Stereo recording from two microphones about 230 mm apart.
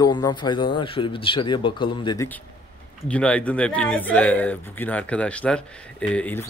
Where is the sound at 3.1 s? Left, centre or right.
Centre.